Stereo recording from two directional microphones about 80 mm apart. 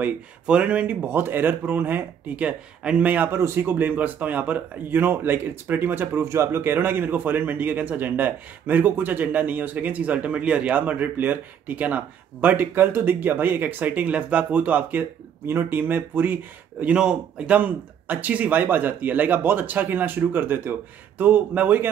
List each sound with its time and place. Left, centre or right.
0.0 s speech: centre
3.3 s speech: right
16.8 s speech: centre